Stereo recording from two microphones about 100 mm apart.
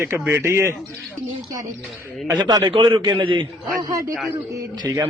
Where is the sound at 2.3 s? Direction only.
40° right (ahead or behind).